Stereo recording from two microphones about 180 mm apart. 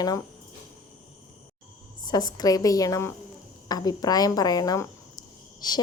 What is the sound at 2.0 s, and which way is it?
Speech, 20° left (ahead or behind).